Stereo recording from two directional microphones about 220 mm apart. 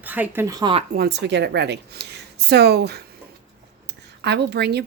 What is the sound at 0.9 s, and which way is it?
Speech, 50° right (ahead or behind).